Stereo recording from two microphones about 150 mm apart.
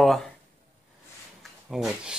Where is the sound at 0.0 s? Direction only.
Centre (ahead or behind).